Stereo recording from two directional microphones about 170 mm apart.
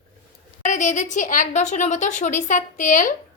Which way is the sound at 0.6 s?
45° left (ahead or behind).